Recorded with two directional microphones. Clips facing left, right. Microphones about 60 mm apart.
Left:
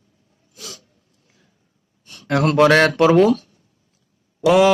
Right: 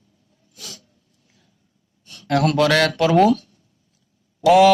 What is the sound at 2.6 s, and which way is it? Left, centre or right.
Mantra, left.